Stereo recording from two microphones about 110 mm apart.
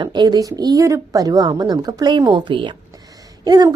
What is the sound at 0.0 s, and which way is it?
A woman's voice, 45° right (ahead or behind).